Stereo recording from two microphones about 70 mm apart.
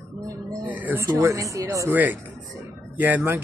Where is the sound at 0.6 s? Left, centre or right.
Right.